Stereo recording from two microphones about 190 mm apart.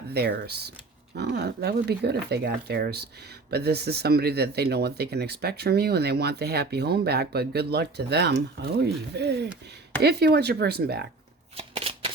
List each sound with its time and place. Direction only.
0.1 s speech: 55° right (ahead or behind)
11.5 s shuffling cards: 30° right (ahead or behind)